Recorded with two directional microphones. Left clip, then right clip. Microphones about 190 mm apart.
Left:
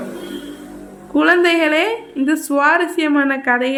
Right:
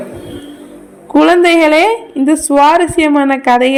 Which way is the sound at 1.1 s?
25° right (ahead or behind).